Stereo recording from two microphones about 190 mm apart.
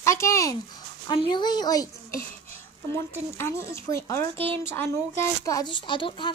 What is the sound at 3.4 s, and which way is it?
A woman's voice, 15° left (ahead or behind).